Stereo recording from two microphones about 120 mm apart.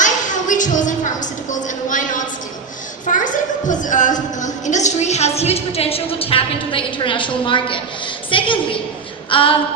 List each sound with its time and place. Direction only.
0.0 s a woman's voice: 90° left; by 9.6 s 45° left (ahead or behind)